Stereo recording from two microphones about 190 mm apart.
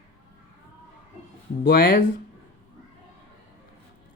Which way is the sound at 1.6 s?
50° left (ahead or behind).